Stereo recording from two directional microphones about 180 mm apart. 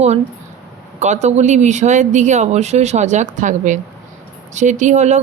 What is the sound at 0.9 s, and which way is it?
Speech, 40° right (ahead or behind).